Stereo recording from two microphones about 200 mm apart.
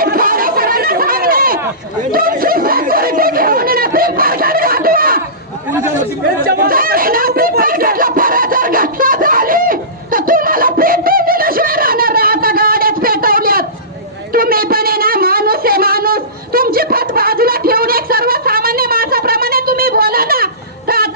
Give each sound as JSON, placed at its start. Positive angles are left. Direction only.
{"t": 0.0, "sound": "chatter", "side_deg": -45}
{"t": 2.1, "sound": "snicker", "side_deg": -45}
{"t": 6.4, "sound": "snicker", "side_deg": -50}
{"t": 14.3, "sound": "a sound", "side_deg": -45}